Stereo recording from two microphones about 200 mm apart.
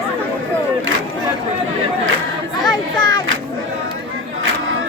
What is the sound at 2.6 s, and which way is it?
Children playing, 20° left (ahead or behind).